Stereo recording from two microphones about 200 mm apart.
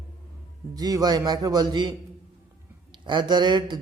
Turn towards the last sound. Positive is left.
turn(degrees=-20)  # may be behind; listen again after turning